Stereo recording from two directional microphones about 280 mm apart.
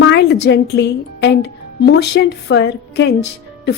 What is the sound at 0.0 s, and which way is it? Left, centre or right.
A woman's voice, left.